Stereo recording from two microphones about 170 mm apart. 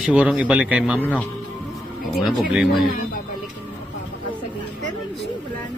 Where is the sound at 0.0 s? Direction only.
5° right (ahead or behind).